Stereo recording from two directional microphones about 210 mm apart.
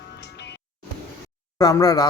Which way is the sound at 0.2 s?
55° left (ahead or behind).